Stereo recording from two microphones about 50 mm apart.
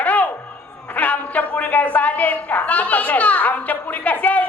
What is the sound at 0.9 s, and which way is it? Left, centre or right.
A woman's voice, left.